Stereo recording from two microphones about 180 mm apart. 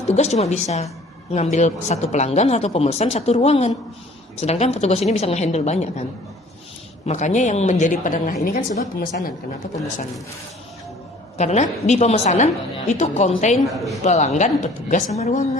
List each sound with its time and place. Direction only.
0.1 s speech: 35° left (ahead or behind); by 9.3 s 55° left (ahead or behind)
11.3 s speech: 40° left (ahead or behind)